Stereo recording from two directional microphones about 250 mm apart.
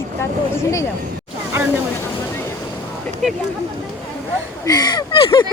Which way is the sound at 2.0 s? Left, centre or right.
Centre.